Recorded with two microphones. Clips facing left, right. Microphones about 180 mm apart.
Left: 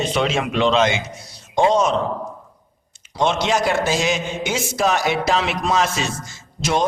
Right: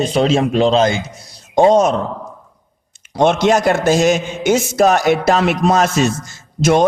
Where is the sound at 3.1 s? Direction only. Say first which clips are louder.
Right 6 dB; 50° right (ahead or behind).